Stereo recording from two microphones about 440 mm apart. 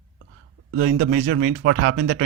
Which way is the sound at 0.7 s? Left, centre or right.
Right.